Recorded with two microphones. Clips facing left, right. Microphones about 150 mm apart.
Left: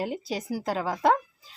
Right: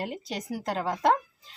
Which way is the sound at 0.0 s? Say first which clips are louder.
Left 3 dB; centre (ahead or behind).